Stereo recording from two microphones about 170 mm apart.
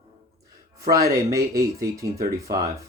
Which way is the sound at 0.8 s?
20° right (ahead or behind).